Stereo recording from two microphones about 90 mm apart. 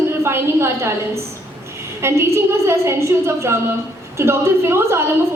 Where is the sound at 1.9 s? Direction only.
30° right (ahead or behind).